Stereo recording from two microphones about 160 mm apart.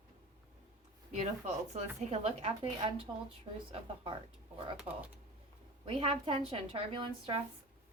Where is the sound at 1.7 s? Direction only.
40° right (ahead or behind).